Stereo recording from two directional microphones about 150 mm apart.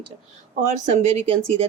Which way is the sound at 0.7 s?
50° right (ahead or behind).